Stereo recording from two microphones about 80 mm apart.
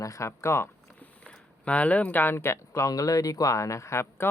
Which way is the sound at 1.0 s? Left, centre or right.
Centre.